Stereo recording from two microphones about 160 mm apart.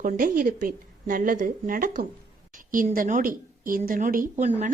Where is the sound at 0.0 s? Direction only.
60° right (ahead or behind).